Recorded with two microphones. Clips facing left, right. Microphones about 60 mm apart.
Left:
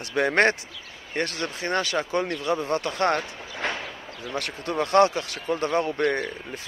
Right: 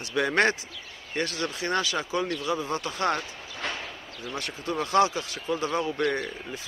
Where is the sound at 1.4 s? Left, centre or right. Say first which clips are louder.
Even; left.